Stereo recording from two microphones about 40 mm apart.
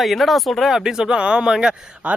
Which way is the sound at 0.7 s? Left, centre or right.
Centre.